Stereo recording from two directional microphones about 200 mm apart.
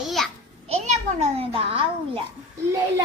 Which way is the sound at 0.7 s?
35° right (ahead or behind).